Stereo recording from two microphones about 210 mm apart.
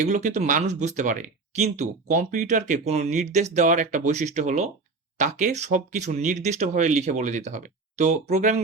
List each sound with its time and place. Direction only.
0.0 s speech: 35° right (ahead or behind)